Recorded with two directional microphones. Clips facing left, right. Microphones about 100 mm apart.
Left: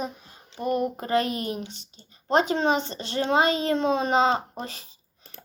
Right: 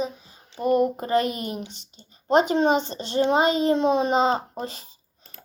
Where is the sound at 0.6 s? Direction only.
25° right (ahead or behind).